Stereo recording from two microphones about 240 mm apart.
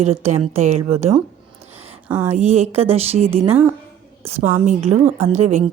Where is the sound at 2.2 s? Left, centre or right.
Right.